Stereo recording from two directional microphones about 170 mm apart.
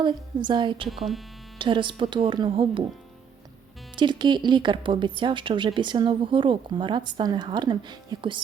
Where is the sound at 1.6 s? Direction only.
30° right (ahead or behind).